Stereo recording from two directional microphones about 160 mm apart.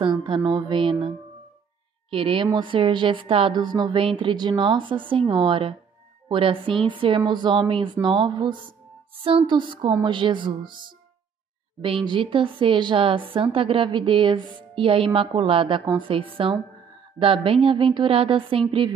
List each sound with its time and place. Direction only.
0.0 s a woman's voice: 30° right (ahead or behind)
11.8 s a woman's voice: 30° right (ahead or behind)